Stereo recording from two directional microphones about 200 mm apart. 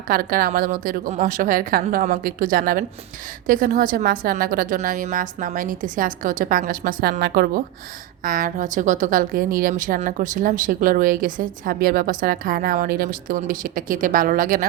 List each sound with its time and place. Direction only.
0.1 s a woman's voice: 45° right (ahead or behind)